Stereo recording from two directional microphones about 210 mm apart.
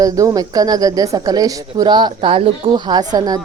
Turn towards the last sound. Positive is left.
turn(degrees=-20)  # may be behind; listen again after turning